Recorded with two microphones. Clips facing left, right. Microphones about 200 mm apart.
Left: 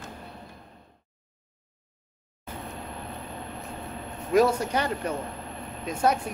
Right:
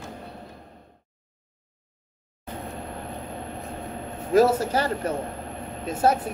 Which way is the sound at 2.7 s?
30° right (ahead or behind).